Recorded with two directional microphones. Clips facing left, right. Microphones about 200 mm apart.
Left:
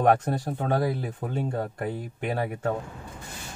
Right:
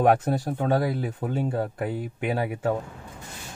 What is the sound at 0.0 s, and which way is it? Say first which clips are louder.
Speech: right 1 dB; 5° right (ahead or behind).